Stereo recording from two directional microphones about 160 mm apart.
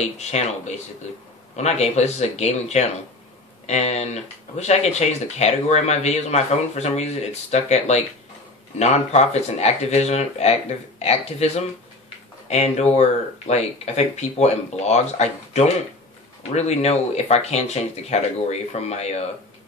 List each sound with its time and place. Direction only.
0.0 s speech: 45° left (ahead or behind)